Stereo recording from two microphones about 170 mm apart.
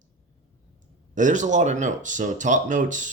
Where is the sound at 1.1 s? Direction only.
45° right (ahead or behind).